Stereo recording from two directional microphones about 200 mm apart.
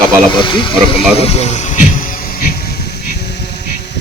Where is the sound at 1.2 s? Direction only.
30° left (ahead or behind); by 3.9 s 55° left (ahead or behind).